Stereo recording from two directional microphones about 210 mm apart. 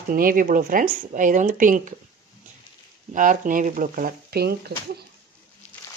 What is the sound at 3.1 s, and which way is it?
Speech, 40° right (ahead or behind).